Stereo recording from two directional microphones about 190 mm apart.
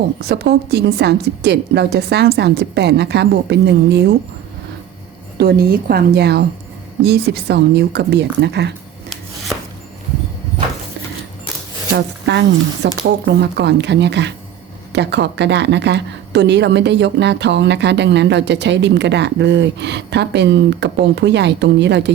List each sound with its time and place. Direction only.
0.2 s speech: 60° right (ahead or behind)
5.4 s a woman's voice: 55° right (ahead or behind)
12.2 s speech: 65° right (ahead or behind)